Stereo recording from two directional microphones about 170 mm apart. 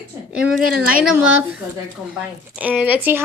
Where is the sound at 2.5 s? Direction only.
10° right (ahead or behind).